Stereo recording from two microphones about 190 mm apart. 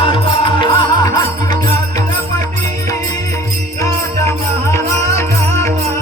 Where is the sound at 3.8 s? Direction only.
15° left (ahead or behind).